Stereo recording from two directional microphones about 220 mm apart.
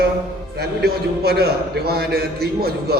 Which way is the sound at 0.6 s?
45° right (ahead or behind).